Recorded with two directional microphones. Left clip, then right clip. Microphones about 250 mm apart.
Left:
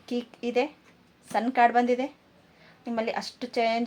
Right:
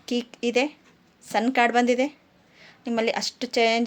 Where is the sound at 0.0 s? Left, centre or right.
Right.